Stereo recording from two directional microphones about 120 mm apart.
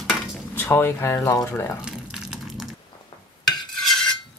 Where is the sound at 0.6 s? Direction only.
20° left (ahead or behind).